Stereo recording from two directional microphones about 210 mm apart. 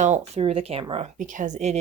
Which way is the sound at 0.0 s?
30° right (ahead or behind).